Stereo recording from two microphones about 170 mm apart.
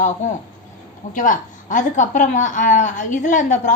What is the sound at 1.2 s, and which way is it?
A woman's voice, 50° left (ahead or behind).